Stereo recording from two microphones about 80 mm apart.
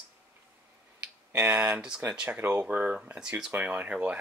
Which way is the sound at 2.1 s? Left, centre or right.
Centre.